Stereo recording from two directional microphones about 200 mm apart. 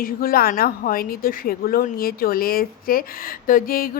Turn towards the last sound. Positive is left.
turn(degrees=45)  # may be behind; listen again after turning